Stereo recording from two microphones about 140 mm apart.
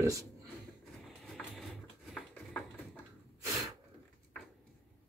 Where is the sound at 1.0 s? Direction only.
5° left (ahead or behind).